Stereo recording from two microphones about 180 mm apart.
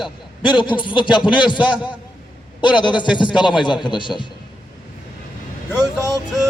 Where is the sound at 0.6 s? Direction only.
25° left (ahead or behind).